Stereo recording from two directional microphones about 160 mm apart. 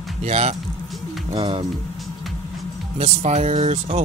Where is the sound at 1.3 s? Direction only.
30° right (ahead or behind).